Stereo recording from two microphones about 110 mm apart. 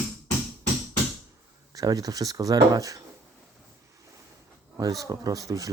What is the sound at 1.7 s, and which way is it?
Speech, 35° right (ahead or behind).